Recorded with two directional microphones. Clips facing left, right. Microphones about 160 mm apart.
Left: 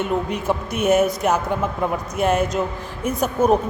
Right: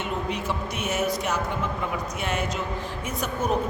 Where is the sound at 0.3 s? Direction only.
50° left (ahead or behind).